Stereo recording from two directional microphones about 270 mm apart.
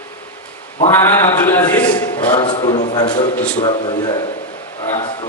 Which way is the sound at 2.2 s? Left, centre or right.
Centre.